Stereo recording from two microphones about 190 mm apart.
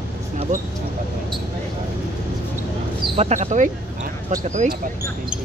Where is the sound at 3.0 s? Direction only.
35° right (ahead or behind).